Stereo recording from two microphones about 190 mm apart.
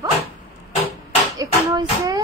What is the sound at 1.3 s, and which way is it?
Speech, 20° right (ahead or behind).